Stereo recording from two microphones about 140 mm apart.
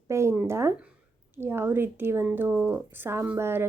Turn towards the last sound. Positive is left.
turn(degrees=-15)  # may be behind; listen again after turning